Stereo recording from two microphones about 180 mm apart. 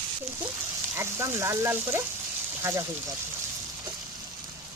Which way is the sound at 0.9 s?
15° right (ahead or behind).